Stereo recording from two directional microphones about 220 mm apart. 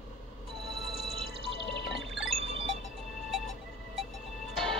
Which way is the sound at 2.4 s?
25° right (ahead or behind).